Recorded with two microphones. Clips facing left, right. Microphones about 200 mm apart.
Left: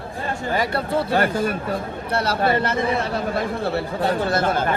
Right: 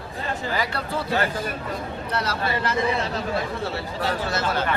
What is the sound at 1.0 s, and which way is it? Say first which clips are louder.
Speech: left 4 dB; 55° left (ahead or behind).